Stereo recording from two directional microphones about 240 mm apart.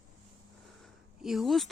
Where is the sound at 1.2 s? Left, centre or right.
Centre.